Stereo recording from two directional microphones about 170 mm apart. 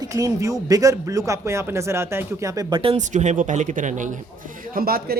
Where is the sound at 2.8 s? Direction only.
35° right (ahead or behind).